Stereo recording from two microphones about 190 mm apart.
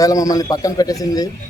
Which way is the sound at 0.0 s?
20° left (ahead or behind).